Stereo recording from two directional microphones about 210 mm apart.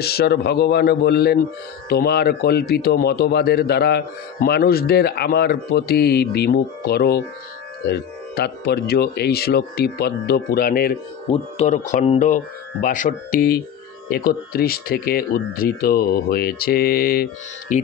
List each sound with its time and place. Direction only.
0.0 s speech: 50° left (ahead or behind)
11.2 s speech: 30° left (ahead or behind)